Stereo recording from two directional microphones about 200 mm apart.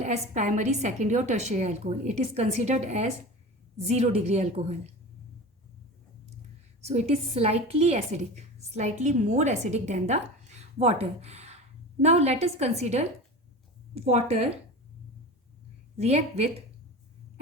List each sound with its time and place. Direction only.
0.0 s a woman's voice: 35° right (ahead or behind)
6.8 s a woman's voice: 30° right (ahead or behind)
16.0 s a woman's voice: 35° right (ahead or behind)